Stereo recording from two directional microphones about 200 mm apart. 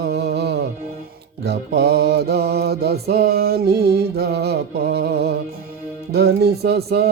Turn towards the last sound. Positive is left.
turn(degrees=-50)  # may be behind; listen again after turning